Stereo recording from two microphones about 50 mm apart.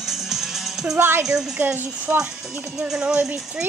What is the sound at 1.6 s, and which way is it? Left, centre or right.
Speech, right.